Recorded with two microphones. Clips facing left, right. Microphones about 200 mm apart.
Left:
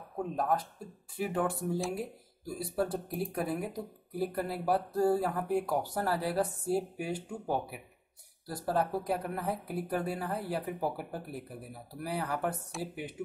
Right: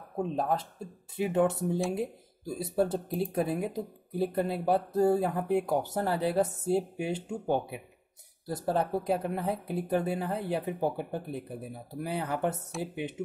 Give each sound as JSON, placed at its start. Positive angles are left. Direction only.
{"t": 0.2, "sound": "speech", "side_deg": -25}